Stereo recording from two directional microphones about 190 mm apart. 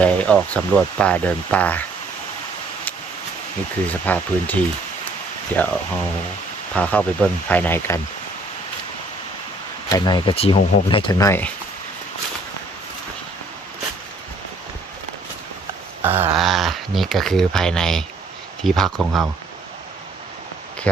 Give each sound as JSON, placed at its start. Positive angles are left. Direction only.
{"t": 0.0, "sound": "speech", "side_deg": 5}
{"t": 4.0, "sound": "speech", "side_deg": 10}
{"t": 6.7, "sound": "speech", "side_deg": 5}
{"t": 9.9, "sound": "speech", "side_deg": 20}
{"t": 16.0, "sound": "speech", "side_deg": -10}